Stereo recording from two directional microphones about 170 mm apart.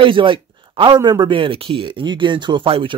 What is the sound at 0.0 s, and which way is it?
A man's voice, 30° right (ahead or behind).